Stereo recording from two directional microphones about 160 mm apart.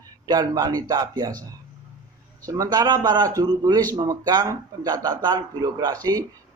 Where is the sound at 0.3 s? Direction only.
25° right (ahead or behind).